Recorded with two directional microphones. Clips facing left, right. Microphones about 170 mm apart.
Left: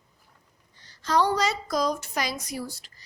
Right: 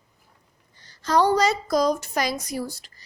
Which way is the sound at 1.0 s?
40° right (ahead or behind).